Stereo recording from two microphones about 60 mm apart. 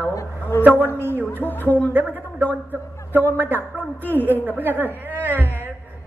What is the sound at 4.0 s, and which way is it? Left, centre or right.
Speech, left.